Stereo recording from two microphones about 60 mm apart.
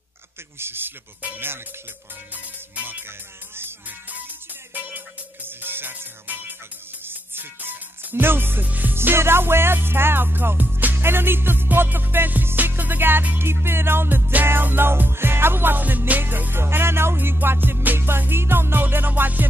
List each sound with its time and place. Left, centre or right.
0.6 s music: right
4.9 s music: right
8.6 s music: right
8.9 s music: right
13.4 s music: right